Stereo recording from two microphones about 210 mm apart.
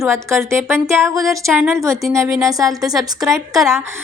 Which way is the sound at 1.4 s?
Centre (ahead or behind).